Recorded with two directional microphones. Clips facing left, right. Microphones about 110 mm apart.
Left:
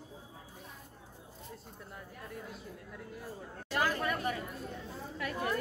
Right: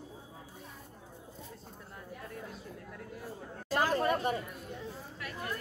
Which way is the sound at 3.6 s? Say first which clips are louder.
Right 2 dB; 35° right (ahead or behind).